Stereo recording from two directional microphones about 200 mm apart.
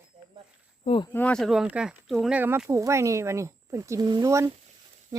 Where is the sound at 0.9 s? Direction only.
25° left (ahead or behind).